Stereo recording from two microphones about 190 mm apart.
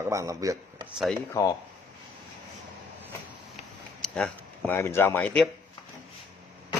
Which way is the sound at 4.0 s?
5° left (ahead or behind).